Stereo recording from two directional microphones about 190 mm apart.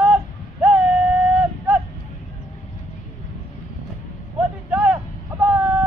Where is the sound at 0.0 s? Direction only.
5° right (ahead or behind).